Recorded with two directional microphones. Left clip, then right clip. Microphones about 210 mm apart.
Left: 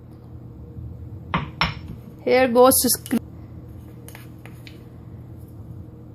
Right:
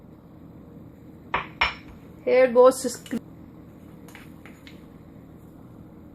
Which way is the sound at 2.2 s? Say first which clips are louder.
Left 1 dB; 45° left (ahead or behind).